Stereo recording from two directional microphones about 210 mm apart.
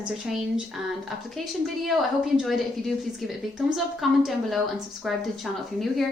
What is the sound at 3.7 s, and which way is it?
A woman's voice, centre (ahead or behind).